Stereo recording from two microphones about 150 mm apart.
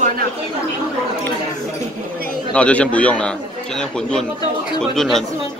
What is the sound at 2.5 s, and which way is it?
A man's voice, 10° left (ahead or behind).